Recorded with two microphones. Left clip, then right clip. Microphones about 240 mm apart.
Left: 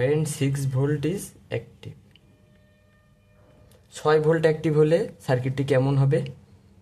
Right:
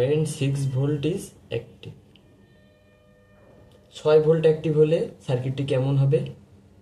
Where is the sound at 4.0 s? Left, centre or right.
Left.